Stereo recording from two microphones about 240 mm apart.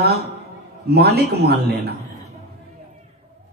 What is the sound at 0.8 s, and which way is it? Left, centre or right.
A man's voice, right.